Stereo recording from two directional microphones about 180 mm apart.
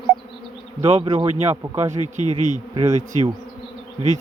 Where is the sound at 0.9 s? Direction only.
30° right (ahead or behind).